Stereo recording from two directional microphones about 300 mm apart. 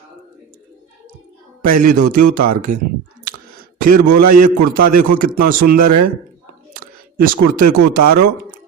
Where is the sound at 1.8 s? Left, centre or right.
Right.